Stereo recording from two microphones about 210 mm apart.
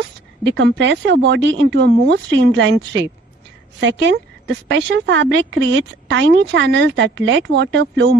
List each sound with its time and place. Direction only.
0.4 s speech: 60° right (ahead or behind)